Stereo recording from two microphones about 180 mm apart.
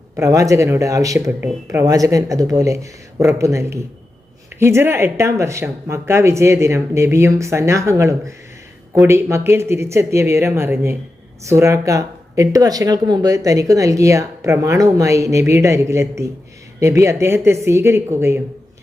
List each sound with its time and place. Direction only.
0.2 s speech: 15° right (ahead or behind)